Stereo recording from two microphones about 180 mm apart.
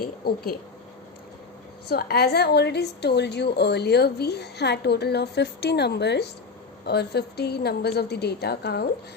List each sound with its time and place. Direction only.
0.0 s a woman's voice: 55° left (ahead or behind)
1.9 s a woman's voice: 60° left (ahead or behind)